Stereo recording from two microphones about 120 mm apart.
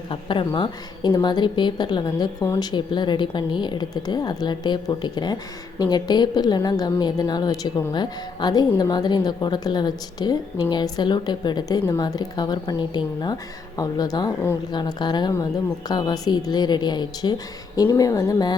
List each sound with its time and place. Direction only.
0.1 s a woman's voice: 45° left (ahead or behind)